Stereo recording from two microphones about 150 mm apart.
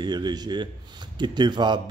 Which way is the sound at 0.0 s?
30° right (ahead or behind).